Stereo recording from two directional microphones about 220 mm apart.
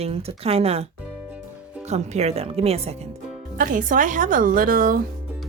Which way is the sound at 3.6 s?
40° right (ahead or behind).